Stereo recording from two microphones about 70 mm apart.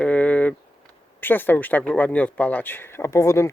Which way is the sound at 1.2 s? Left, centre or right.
Left.